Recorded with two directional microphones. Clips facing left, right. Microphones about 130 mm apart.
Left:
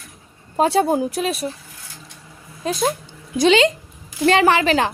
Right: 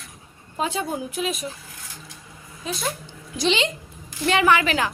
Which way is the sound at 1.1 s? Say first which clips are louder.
Left 4 dB; 35° left (ahead or behind).